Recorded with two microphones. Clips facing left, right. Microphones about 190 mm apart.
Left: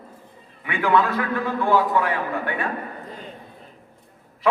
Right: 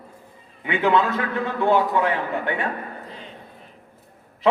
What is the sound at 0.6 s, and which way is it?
A man's voice, 20° right (ahead or behind).